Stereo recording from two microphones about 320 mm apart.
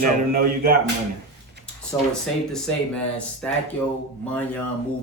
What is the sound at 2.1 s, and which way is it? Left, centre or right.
Speech, centre.